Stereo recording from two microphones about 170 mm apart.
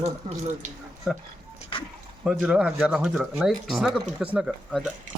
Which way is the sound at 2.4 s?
5° right (ahead or behind).